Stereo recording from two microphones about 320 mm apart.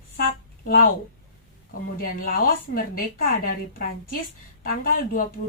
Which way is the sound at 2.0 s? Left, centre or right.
Left.